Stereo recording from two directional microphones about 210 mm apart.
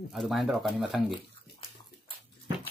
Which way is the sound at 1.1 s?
25° left (ahead or behind).